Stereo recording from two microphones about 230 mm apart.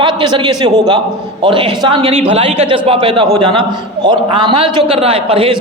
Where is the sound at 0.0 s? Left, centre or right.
Right.